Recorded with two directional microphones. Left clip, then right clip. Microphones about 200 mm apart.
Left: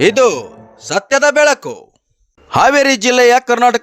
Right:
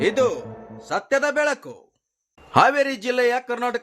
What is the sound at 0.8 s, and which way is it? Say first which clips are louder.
A man's voice: left 9 dB; 50° left (ahead or behind).